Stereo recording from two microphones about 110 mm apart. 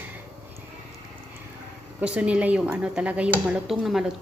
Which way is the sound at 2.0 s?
10° right (ahead or behind).